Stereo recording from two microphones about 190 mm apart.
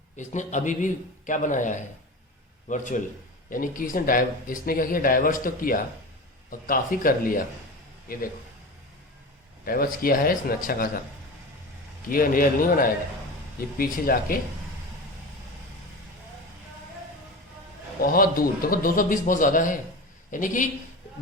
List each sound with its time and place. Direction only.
0.2 s a man's voice: 40° left (ahead or behind)
9.6 s speech: 50° left (ahead or behind)
12.0 s speech: 45° left (ahead or behind)
18.0 s speech: 50° left (ahead or behind)